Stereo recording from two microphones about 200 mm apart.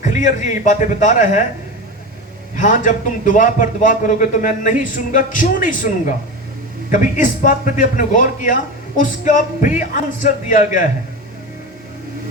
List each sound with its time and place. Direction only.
0.0 s a man's voice: 40° left (ahead or behind)
2.6 s a man's voice: 40° left (ahead or behind)